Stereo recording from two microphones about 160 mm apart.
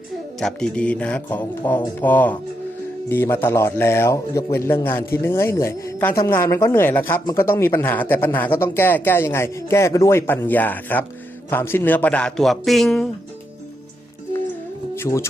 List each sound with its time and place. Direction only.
0.3 s speech: 5° left (ahead or behind)
14.9 s speech: 15° left (ahead or behind)